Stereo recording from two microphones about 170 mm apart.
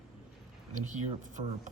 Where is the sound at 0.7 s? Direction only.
45° right (ahead or behind).